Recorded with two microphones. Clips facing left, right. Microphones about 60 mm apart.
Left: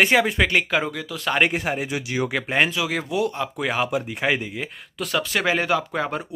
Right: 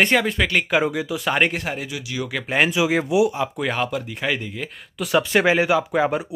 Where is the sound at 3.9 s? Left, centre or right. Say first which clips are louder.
Left 2 dB; centre.